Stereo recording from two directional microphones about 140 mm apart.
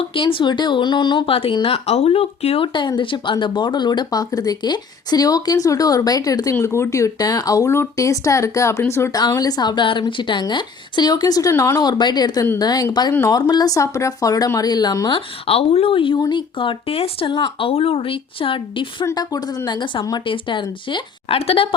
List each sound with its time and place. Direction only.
0.0 s speech: 40° left (ahead or behind)
15.4 s speech: 45° left (ahead or behind)
19.0 s a woman's voice: 25° left (ahead or behind); by 21.7 s 45° left (ahead or behind)